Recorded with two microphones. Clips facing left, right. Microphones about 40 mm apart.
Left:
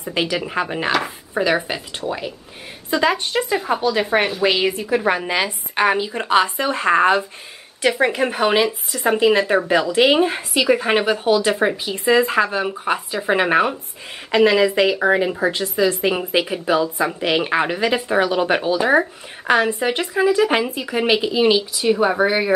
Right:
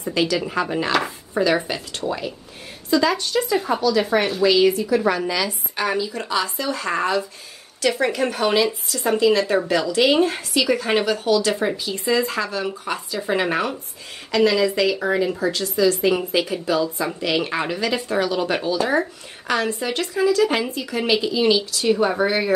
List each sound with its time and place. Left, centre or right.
0.0 s a woman's voice: left
2.9 s a woman's voice: left
3.5 s a woman's voice: centre
4.4 s a woman's voice: left; by 22.5 s centre